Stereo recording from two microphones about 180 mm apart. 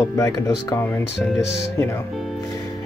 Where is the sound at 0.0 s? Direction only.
15° left (ahead or behind).